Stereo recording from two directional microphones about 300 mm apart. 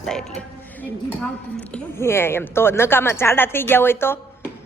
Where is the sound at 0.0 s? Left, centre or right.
Centre.